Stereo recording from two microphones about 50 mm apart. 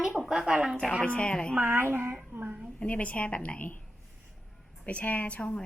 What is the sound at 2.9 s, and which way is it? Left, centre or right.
Speech, left.